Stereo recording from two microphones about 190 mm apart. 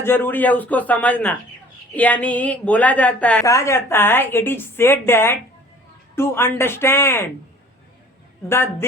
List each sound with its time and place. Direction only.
0.0 s a woman's voice: 10° left (ahead or behind)
8.4 s a woman's voice: 10° left (ahead or behind)